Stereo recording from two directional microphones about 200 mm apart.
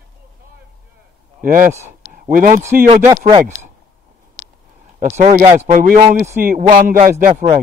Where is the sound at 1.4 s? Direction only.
45° right (ahead or behind).